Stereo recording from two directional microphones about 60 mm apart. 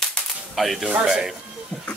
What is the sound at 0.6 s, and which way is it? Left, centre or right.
Whip, centre.